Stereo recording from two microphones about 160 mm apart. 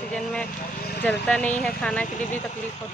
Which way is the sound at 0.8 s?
90° left.